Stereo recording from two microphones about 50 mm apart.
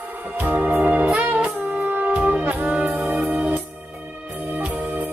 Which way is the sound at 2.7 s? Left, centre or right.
Right.